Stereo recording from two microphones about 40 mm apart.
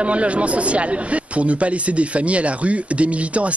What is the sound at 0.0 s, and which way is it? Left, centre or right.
A man's voice, right.